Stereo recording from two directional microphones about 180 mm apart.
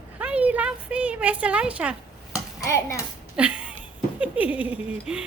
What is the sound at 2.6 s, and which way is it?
Speech, 15° left (ahead or behind).